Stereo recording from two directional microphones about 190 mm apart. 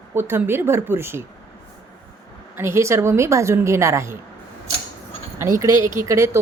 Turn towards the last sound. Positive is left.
turn(degrees=-15)  # may be behind; listen again after turning